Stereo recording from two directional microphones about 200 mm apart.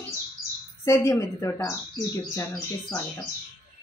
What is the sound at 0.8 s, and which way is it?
Speech, 15° left (ahead or behind).